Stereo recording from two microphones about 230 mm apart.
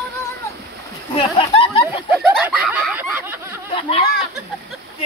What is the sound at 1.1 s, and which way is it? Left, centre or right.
Speech, left.